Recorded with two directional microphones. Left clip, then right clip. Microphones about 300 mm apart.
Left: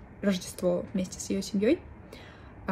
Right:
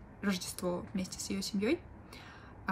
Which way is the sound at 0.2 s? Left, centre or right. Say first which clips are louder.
Left 7 dB; centre.